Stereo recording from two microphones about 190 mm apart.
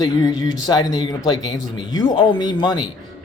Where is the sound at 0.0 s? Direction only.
20° left (ahead or behind).